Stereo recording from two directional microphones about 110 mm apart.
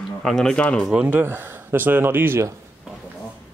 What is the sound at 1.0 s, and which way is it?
Speech, 20° right (ahead or behind).